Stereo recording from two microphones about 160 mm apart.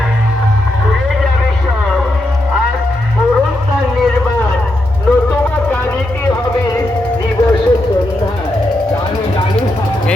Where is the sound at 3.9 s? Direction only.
Centre (ahead or behind); by 6.8 s 20° left (ahead or behind).